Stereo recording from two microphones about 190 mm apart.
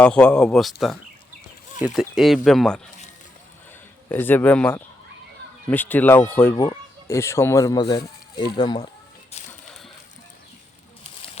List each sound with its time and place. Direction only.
0.0 s speech: 5° left (ahead or behind)
4.1 s speech: 10° left (ahead or behind)
9.4 s horse: 35° left (ahead or behind)